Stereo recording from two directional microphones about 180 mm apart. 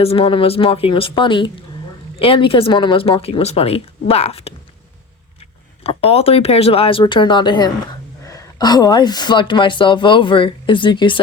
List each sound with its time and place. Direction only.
0.0 s speech: 30° left (ahead or behind)
5.8 s a woman's voice: 35° left (ahead or behind)